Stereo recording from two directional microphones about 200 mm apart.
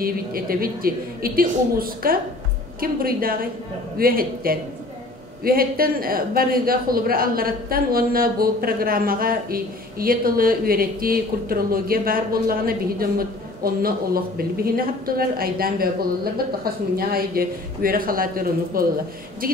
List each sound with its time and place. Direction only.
0.0 s speech: 45° right (ahead or behind)